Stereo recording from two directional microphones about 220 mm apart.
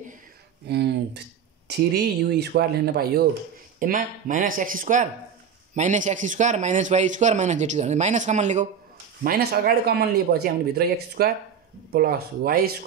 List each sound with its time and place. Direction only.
0.7 s a sound: 50° right (ahead or behind)
1.7 s a man's voice: 50° right (ahead or behind); by 8.6 s 30° right (ahead or behind)
9.7 s speech: 45° right (ahead or behind)